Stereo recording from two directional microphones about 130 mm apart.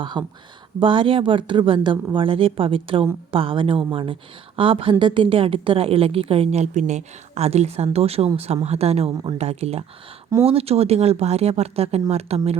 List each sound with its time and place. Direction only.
0.0 s a woman's voice: 35° right (ahead or behind); by 12.5 s 55° right (ahead or behind)